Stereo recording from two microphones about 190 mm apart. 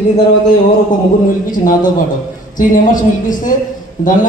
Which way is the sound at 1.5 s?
45° left (ahead or behind).